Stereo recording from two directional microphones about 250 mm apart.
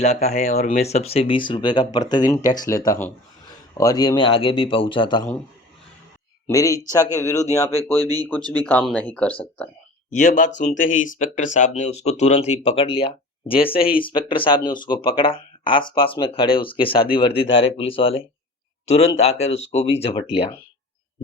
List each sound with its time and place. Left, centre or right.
0.0 s speech: left
6.5 s speech: centre
8.4 s speech: centre
10.1 s speech: left
10.8 s speech: left
11.2 s speech: left